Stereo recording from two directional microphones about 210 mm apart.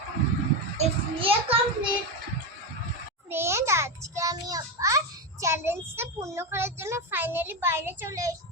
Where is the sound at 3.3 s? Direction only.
10° right (ahead or behind).